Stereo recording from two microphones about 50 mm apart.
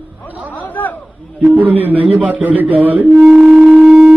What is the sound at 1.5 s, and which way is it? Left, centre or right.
A man's voice, right.